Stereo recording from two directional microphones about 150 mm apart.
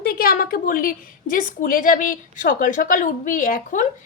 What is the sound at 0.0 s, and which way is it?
A woman's voice, 85° left.